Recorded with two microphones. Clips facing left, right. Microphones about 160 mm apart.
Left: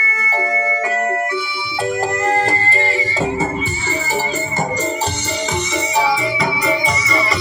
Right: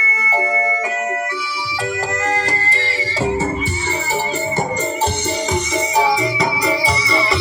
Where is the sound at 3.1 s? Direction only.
70° right (ahead or behind).